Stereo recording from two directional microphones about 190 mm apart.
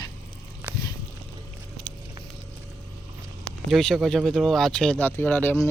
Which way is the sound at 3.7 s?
Centre (ahead or behind).